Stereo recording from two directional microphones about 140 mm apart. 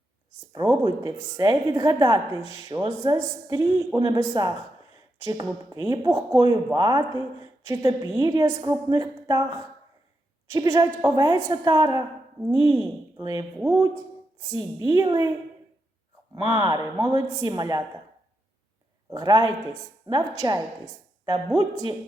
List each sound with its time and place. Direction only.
0.7 s a woman's voice: 30° right (ahead or behind)
5.2 s a woman's voice: 25° right (ahead or behind)
16.3 s a woman's voice: 30° right (ahead or behind)
19.1 s a woman's voice: 30° right (ahead or behind)